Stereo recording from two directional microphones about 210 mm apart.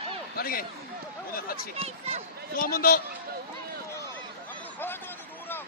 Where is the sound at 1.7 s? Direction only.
25° right (ahead or behind).